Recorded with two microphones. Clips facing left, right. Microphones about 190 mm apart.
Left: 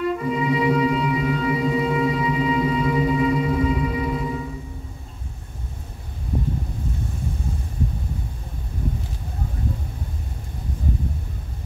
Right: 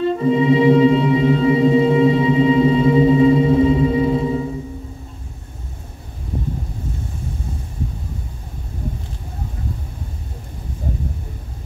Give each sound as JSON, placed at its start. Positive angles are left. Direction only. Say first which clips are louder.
{"t": 0.0, "sound": "music", "louder": "right 7 dB", "side_deg": -30}